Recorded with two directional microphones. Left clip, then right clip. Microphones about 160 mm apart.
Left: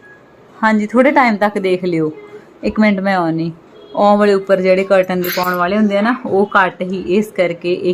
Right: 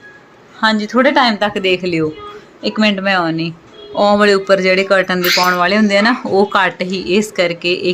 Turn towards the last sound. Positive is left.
turn(degrees=10)  # may be behind; listen again after turning